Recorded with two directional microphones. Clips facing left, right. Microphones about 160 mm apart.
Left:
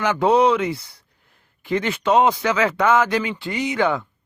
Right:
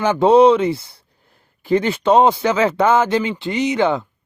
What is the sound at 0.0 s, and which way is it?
Speech, 30° right (ahead or behind).